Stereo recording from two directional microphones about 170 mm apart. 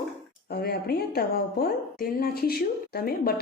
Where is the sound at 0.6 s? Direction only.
70° left (ahead or behind).